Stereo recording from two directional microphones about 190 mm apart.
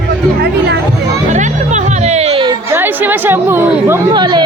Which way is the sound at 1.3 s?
40° right (ahead or behind).